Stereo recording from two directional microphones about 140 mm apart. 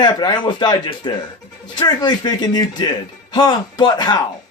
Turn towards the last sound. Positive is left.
turn(degrees=30)  # may be behind; listen again after turning